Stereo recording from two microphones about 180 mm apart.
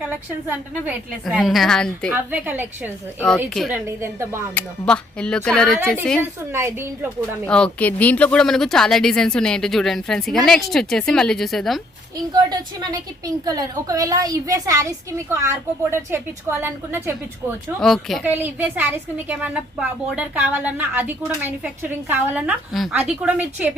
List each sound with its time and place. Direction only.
1.2 s speech: centre (ahead or behind)
2.3 s a woman's voice: 10° right (ahead or behind)
3.2 s speech: 5° left (ahead or behind)
3.7 s a woman's voice: 15° right (ahead or behind)
4.5 s speech: 5° left (ahead or behind)
6.5 s a woman's voice: 15° right (ahead or behind)
7.4 s speech: 5° left (ahead or behind)
12.3 s a woman's voice: 20° right (ahead or behind)
17.7 s speech: centre (ahead or behind)
18.3 s a woman's voice: 10° right (ahead or behind)